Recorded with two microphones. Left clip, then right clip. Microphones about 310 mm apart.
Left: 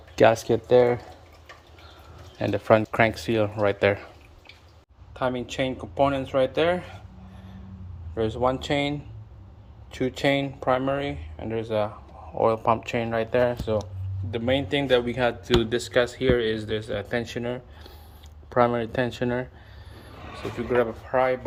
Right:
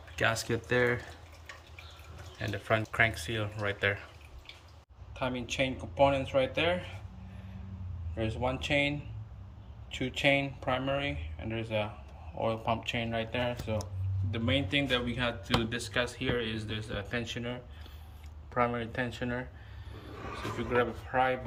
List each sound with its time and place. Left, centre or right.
0.2 s speech: centre
2.4 s speech: centre
5.1 s speech: centre
8.1 s speech: centre
8.4 s speech: left
8.7 s speech: centre
10.2 s speech: centre
20.7 s speech: centre